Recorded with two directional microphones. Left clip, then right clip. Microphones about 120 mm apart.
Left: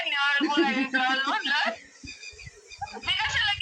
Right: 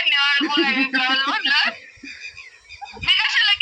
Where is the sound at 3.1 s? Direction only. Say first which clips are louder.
Right 9 dB; 35° left (ahead or behind).